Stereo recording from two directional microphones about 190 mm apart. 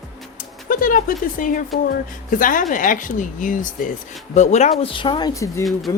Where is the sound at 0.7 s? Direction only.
45° left (ahead or behind).